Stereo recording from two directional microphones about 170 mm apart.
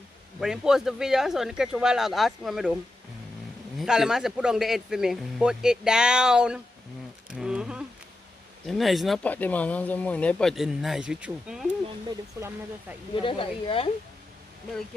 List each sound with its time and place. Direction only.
0.4 s speech: 5° right (ahead or behind)
7.2 s insect: 5° right (ahead or behind)
8.6 s speech: centre (ahead or behind); by 12.5 s 15° right (ahead or behind)
13.1 s speech: 30° left (ahead or behind)